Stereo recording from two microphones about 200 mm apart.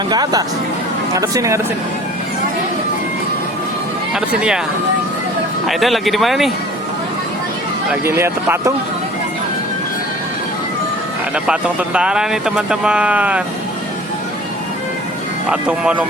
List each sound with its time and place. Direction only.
0.1 s speech: 20° right (ahead or behind)
4.1 s speech: 5° right (ahead or behind)
5.6 s speech: centre (ahead or behind)
8.0 s speech: 10° right (ahead or behind)
11.4 s speech: 5° right (ahead or behind)
15.4 s speech: 5° right (ahead or behind)